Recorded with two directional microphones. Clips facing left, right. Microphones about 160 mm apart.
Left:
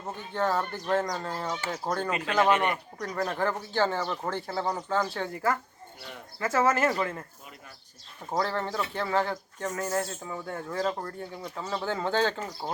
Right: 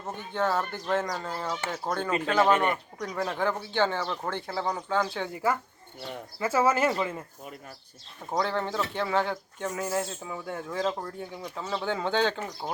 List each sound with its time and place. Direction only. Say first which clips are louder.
0.3 s speech: even; 5° right (ahead or behind)
6.4 s speech: right 1 dB; 10° right (ahead or behind)
8.3 s speech: right 1 dB; centre (ahead or behind)